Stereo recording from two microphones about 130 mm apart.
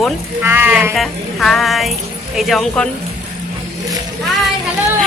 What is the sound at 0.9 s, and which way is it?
Speech, centre (ahead or behind).